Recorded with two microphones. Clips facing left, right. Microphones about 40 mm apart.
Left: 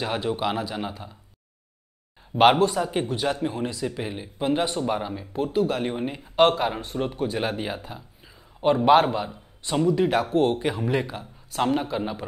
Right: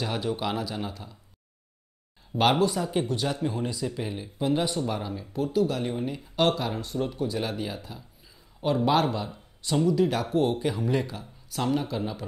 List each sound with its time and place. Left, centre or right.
0.0 s speech: left
2.6 s speech: left